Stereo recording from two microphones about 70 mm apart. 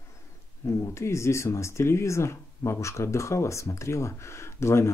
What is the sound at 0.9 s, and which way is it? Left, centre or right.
Speech, left.